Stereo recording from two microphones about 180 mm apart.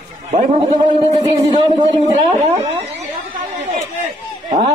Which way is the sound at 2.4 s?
35° right (ahead or behind).